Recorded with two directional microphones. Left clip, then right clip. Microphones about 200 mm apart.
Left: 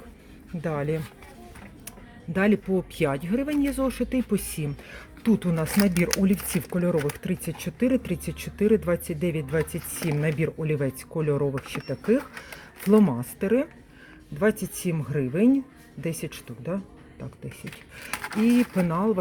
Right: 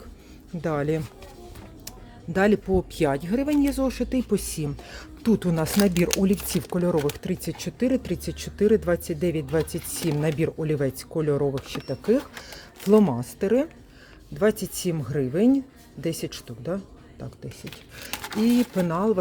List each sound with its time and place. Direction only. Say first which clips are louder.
0.6 s speech: right 3 dB; 15° right (ahead or behind)
2.3 s speech: right 3 dB; 10° right (ahead or behind)
18.1 s a sound: left 1 dB; 15° right (ahead or behind)
18.3 s speech: even; 5° right (ahead or behind)